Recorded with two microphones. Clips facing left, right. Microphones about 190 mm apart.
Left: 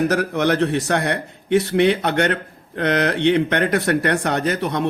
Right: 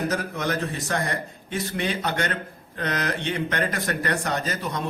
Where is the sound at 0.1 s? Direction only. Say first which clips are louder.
Left 8 dB; 70° left (ahead or behind).